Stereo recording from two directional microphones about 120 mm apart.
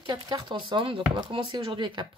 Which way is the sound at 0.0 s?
35° right (ahead or behind).